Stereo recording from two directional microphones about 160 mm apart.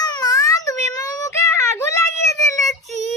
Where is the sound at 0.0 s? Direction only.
25° left (ahead or behind).